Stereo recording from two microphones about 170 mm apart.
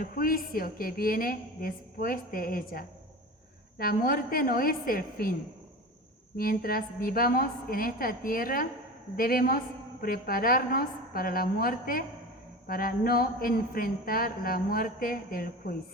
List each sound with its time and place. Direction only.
0.0 s speech: 55° left (ahead or behind)
6.3 s speech: 60° left (ahead or behind)